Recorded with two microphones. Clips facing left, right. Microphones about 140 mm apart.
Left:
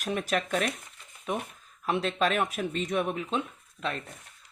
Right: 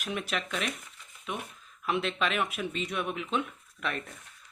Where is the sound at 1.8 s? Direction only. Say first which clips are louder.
Left 3 dB; 35° left (ahead or behind).